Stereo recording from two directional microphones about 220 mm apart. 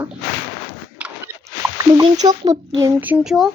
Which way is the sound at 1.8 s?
15° right (ahead or behind).